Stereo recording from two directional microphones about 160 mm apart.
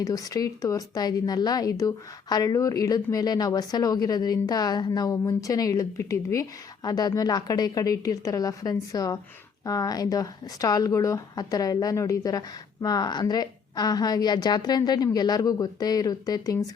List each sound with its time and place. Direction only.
0.0 s a woman's voice: 20° left (ahead or behind)